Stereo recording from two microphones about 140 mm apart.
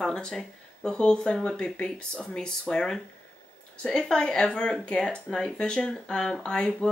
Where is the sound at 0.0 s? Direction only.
5° left (ahead or behind).